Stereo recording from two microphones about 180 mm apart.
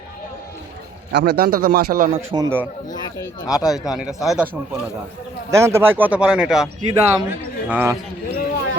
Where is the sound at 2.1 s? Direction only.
30° right (ahead or behind).